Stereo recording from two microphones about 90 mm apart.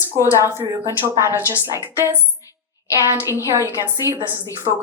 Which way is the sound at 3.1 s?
30° right (ahead or behind).